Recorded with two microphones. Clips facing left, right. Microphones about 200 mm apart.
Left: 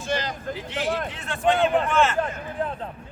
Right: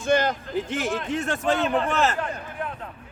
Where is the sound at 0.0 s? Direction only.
50° right (ahead or behind).